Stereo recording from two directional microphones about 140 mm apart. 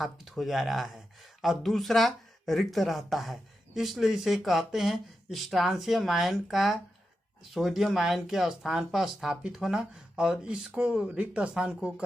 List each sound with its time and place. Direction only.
0.0 s speech: centre (ahead or behind)